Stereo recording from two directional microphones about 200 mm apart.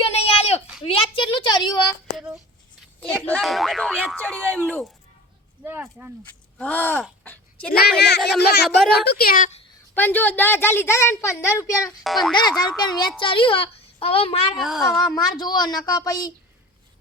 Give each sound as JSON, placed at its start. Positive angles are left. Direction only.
{"t": 0.0, "sound": "a sound", "side_deg": 30}
{"t": 0.9, "sound": "a woman's voice", "side_deg": 25}
{"t": 2.1, "sound": "a sound", "side_deg": -5}
{"t": 3.1, "sound": "speech", "side_deg": 5}
{"t": 5.6, "sound": "speech", "side_deg": -10}
{"t": 6.2, "sound": "a sound", "side_deg": 10}
{"t": 7.9, "sound": "speech", "side_deg": 55}
{"t": 8.6, "sound": "speech", "side_deg": 0}
{"t": 9.0, "sound": "speech", "side_deg": 50}
{"t": 9.9, "sound": "a woman's voice", "side_deg": 10}
{"t": 12.0, "sound": "speech", "side_deg": 0}
{"t": 12.3, "sound": "a woman's voice", "side_deg": 20}
{"t": 14.5, "sound": "speech", "side_deg": 0}
{"t": 15.0, "sound": "a woman's voice", "side_deg": 20}